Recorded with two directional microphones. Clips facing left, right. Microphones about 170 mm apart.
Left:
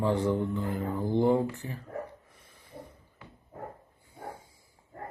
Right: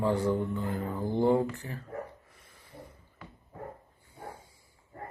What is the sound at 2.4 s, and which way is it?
Snort, 15° left (ahead or behind).